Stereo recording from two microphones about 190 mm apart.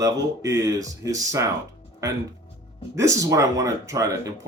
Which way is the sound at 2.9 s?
15° right (ahead or behind).